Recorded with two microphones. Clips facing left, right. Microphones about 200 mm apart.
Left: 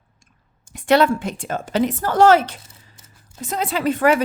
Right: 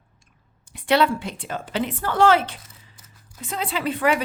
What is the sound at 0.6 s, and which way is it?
A woman's voice, 45° left (ahead or behind).